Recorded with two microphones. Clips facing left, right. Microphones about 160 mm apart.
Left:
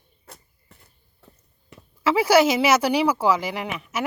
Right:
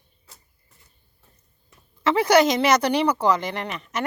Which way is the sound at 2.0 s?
5° left (ahead or behind).